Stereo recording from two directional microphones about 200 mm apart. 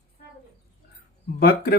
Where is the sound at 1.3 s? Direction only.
50° left (ahead or behind).